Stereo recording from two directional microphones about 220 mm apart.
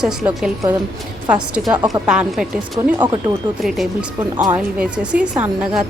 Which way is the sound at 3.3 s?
10° right (ahead or behind).